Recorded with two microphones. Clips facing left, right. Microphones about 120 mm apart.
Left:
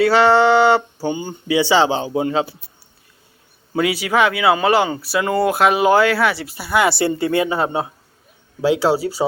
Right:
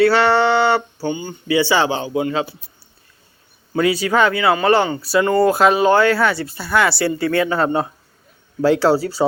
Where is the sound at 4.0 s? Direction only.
5° left (ahead or behind).